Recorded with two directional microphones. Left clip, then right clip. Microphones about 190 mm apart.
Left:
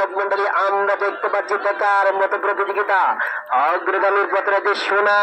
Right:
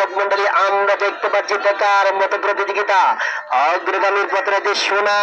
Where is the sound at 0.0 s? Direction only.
25° right (ahead or behind).